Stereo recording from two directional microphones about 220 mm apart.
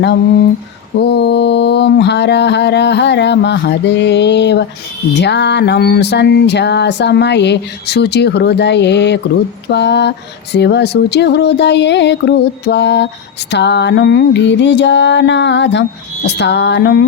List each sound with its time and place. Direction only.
1.0 s music: 50° left (ahead or behind)